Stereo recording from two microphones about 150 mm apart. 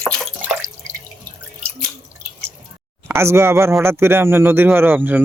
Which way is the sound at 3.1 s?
15° right (ahead or behind).